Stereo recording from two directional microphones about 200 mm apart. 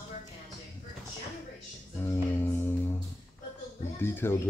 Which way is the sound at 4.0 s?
10° left (ahead or behind).